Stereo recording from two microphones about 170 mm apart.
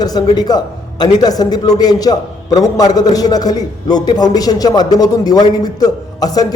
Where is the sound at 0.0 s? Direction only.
25° left (ahead or behind).